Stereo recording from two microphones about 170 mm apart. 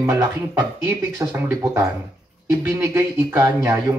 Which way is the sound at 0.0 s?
15° right (ahead or behind).